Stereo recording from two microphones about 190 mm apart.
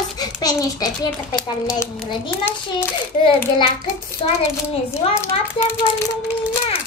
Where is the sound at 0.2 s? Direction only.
20° left (ahead or behind).